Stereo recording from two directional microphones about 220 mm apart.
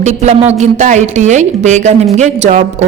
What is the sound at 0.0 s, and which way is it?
A woman's voice, 30° right (ahead or behind).